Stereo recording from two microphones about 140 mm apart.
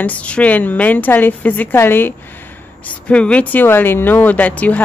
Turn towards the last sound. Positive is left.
turn(degrees=10)  # may be behind; listen again after turning